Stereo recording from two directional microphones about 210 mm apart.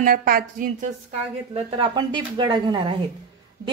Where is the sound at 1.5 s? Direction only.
25° right (ahead or behind).